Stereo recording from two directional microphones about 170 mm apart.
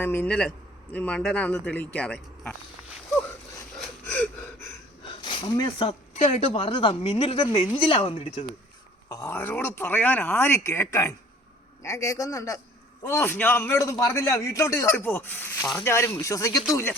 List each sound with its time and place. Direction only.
0.0 s a man's voice: 10° left (ahead or behind)
3.8 s gasp: 5° left (ahead or behind)
5.2 s speech: 25° left (ahead or behind)
9.0 s a man's voice: 20° left (ahead or behind)